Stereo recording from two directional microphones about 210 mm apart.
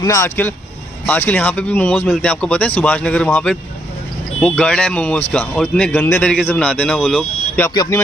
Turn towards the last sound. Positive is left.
turn(degrees=15)  # may be behind; listen again after turning